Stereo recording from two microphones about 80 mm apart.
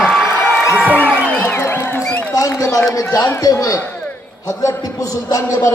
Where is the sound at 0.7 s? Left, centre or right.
Centre.